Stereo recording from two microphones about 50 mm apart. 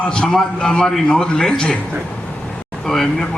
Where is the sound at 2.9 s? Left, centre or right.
Centre.